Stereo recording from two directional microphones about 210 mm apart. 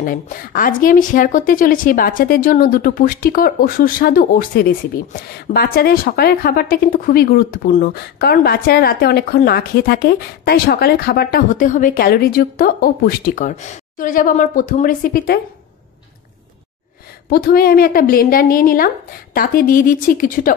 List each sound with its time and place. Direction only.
0.0 s a woman's voice: 40° left (ahead or behind)
17.3 s a woman's voice: 45° left (ahead or behind)